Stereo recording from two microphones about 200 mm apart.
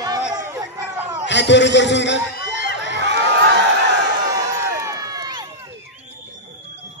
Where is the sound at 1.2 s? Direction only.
60° left (ahead or behind).